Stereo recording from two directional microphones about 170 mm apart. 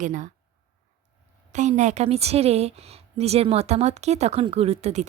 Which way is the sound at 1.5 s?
45° right (ahead or behind).